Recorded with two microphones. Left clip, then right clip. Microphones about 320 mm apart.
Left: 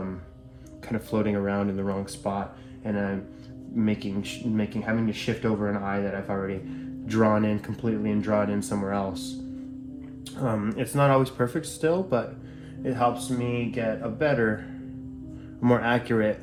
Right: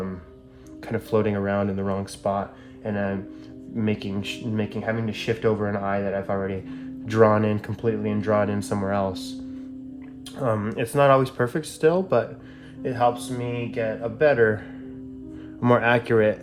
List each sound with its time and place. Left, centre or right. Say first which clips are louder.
0.9 s speech: right 4 dB; right
10.4 s speech: right 4 dB; right
15.6 s speech: right 4 dB; right